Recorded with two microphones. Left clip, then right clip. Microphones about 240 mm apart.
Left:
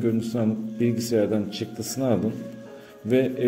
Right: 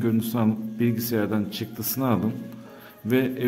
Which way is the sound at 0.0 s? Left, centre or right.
Right.